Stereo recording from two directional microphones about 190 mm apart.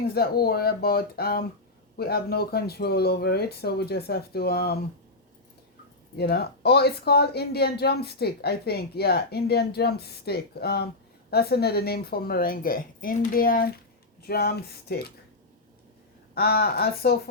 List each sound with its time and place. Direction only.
0.1 s speech: 55° left (ahead or behind)
6.1 s speech: 55° left (ahead or behind)
16.3 s speech: 55° left (ahead or behind)